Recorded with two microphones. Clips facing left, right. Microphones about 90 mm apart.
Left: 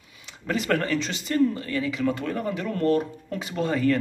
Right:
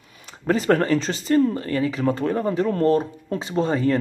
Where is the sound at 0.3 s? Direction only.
35° right (ahead or behind).